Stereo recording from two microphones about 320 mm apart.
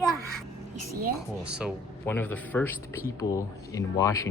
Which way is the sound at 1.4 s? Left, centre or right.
Centre.